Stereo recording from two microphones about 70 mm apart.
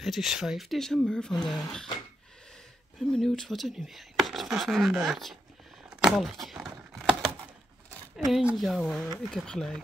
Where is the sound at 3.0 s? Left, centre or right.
Centre.